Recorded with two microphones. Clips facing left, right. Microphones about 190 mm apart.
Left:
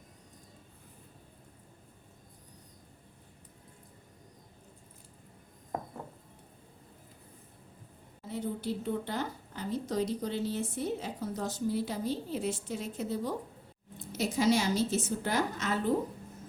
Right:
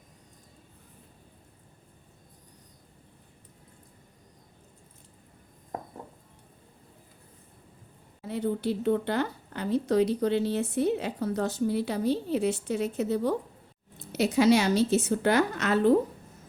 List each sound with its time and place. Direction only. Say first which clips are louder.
8.2 s a woman's voice: right 6 dB; 65° right (ahead or behind)